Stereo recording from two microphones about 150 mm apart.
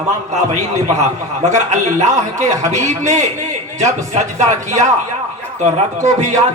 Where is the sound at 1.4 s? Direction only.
50° right (ahead or behind).